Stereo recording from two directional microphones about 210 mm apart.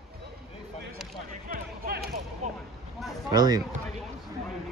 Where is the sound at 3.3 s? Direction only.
20° right (ahead or behind).